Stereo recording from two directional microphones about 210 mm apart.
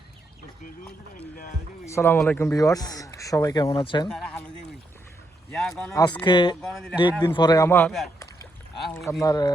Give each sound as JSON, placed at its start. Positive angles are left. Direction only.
{"t": 1.4, "sound": "speech", "side_deg": 35}
{"t": 1.9, "sound": "speech", "side_deg": 10}
{"t": 4.1, "sound": "speech", "side_deg": 0}
{"t": 5.5, "sound": "speech", "side_deg": 0}
{"t": 5.9, "sound": "speech", "side_deg": 20}
{"t": 6.6, "sound": "speech", "side_deg": 0}
{"t": 7.2, "sound": "speech", "side_deg": 20}
{"t": 9.2, "sound": "speech", "side_deg": 20}